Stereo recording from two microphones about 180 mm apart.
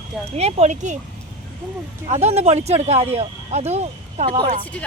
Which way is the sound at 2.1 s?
35° right (ahead or behind).